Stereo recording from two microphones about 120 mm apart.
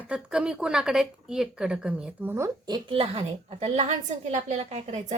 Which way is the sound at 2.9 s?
55° right (ahead or behind).